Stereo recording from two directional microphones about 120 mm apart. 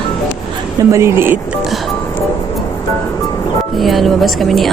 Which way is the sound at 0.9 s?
20° right (ahead or behind).